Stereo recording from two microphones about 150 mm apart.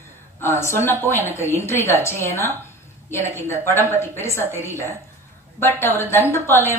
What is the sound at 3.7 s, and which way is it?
Speech, 15° left (ahead or behind).